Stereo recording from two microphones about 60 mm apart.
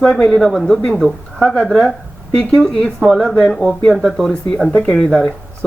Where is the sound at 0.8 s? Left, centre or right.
Centre.